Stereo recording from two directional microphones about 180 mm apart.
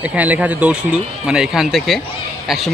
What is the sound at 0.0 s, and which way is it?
Speech, 10° right (ahead or behind).